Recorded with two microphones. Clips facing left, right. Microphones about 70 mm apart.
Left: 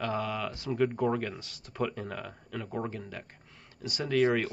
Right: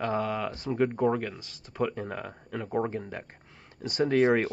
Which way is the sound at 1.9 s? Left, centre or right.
Centre.